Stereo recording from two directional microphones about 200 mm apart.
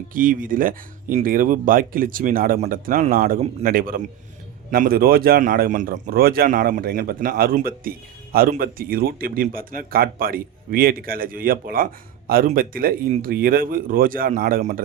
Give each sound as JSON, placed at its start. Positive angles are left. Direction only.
{"t": 0.1, "sound": "a man's voice", "side_deg": -45}